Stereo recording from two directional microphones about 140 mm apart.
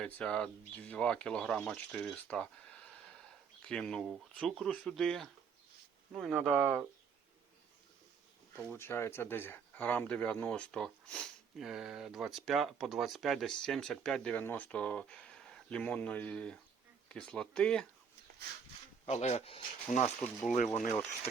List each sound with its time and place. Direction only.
0.0 s speech: 5° left (ahead or behind)
6.3 s speech: 10° right (ahead or behind)
8.5 s speech: 15° left (ahead or behind)
19.0 s speech: 50° left (ahead or behind)
20.2 s speech: 5° left (ahead or behind)